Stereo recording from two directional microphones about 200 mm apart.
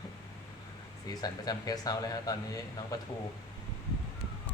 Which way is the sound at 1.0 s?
20° left (ahead or behind).